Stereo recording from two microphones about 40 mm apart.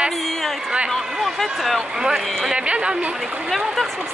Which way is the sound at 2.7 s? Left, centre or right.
Right.